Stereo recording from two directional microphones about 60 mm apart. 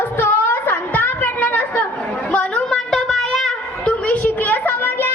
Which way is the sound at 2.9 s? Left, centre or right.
Centre.